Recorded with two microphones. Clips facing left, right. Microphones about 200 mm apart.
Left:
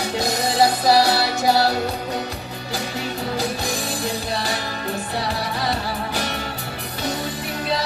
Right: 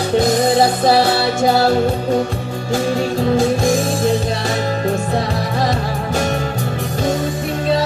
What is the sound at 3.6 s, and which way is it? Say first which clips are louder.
Music: right 10 dB; 50° right (ahead or behind).